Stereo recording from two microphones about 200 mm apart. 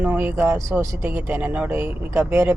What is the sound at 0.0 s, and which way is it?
Speech, 5° right (ahead or behind).